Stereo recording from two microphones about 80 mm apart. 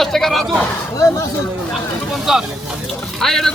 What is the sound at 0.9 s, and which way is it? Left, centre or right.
Speech, left.